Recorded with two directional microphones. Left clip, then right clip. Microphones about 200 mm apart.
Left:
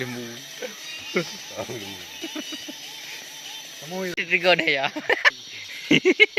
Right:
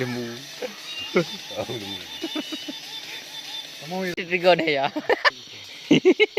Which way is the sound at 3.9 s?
5° right (ahead or behind).